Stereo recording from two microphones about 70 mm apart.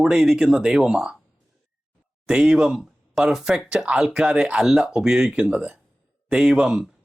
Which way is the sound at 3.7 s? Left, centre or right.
Centre.